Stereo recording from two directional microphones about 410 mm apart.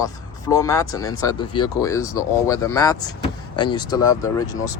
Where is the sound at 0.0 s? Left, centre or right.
Centre.